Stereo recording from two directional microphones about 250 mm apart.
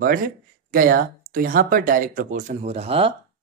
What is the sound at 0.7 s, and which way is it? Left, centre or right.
Speech, right.